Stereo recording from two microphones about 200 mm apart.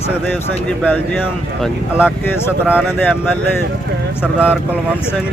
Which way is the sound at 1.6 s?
5° right (ahead or behind).